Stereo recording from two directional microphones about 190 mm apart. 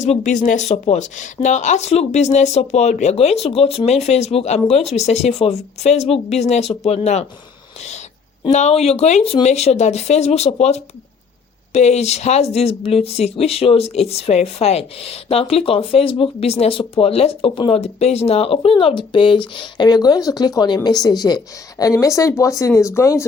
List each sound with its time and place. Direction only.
0.0 s speech: 40° left (ahead or behind)
7.8 s owl: 35° left (ahead or behind)
8.4 s speech: 35° left (ahead or behind); by 23.2 s 15° left (ahead or behind)